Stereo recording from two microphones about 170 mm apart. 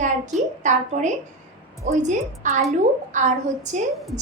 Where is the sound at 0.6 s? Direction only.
45° right (ahead or behind).